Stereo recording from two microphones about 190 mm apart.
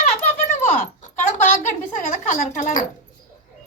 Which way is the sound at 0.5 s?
40° left (ahead or behind).